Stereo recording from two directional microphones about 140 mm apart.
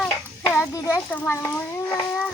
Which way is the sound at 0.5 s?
20° left (ahead or behind).